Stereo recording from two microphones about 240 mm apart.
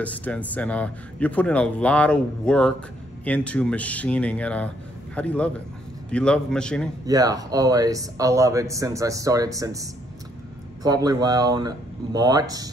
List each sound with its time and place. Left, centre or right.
0.0 s speech: centre
7.1 s speech: centre